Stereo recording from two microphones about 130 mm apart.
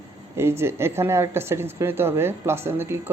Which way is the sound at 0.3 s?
20° right (ahead or behind).